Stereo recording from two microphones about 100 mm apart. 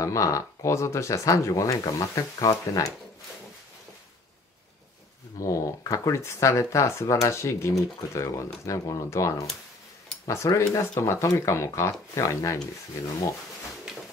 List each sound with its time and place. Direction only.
0.0 s speech: 30° left (ahead or behind)
5.4 s speech: 35° left (ahead or behind)